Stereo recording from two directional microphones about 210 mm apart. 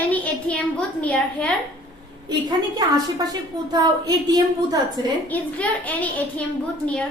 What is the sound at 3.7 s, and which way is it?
A woman's voice, 20° right (ahead or behind).